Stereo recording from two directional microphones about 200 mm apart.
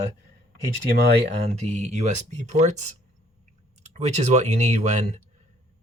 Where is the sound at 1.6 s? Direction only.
35° right (ahead or behind).